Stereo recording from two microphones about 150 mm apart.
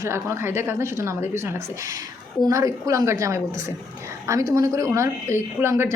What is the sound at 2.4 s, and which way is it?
A man's voice, 20° right (ahead or behind).